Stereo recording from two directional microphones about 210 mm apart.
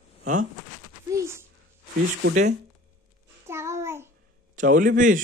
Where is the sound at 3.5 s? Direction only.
15° right (ahead or behind).